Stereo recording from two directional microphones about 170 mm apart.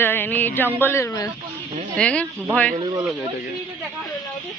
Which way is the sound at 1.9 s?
5° left (ahead or behind).